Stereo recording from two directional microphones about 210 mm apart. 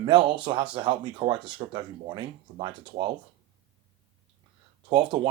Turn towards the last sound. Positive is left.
turn(degrees=-25)  # may be behind; listen again after turning